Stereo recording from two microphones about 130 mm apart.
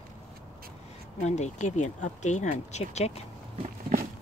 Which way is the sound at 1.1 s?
60° left (ahead or behind).